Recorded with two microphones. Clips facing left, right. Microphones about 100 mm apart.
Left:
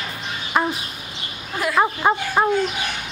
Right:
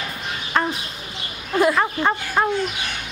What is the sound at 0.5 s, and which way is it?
Bird, 10° left (ahead or behind).